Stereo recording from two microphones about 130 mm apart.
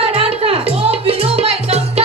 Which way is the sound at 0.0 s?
50° right (ahead or behind).